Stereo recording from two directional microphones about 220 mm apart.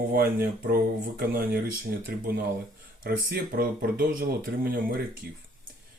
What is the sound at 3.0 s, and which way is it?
Speech, 40° right (ahead or behind).